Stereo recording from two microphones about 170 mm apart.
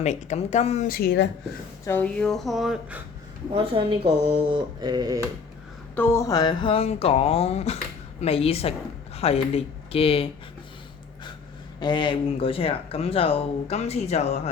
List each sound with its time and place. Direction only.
0.0 s speech: 40° left (ahead or behind)
0.9 s speech: 65° left (ahead or behind)
1.8 s speech: 10° left (ahead or behind)
3.5 s a woman's voice: 35° right (ahead or behind)
4.8 s cutlery: 25° right (ahead or behind)
6.0 s speech: 15° left (ahead or behind); by 10.2 s 35° left (ahead or behind)
11.8 s speech: 25° left (ahead or behind)